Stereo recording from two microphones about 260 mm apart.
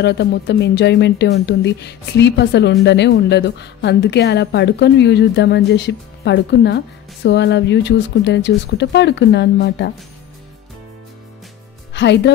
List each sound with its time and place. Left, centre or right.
0.0 s a woman's voice: left
11.9 s speech: left